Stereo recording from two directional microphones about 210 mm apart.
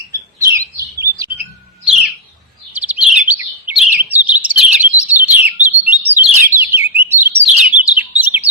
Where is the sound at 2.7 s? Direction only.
5° right (ahead or behind).